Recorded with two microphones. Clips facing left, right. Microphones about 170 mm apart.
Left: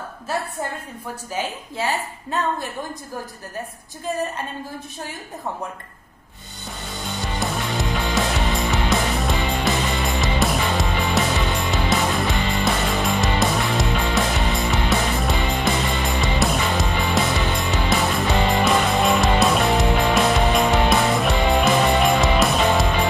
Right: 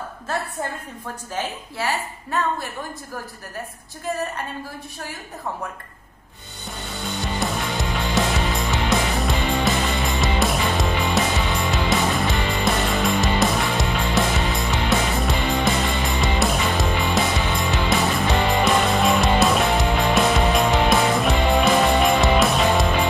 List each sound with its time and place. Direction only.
1.3 s a woman's voice: 15° left (ahead or behind)
7.3 s music: centre (ahead or behind)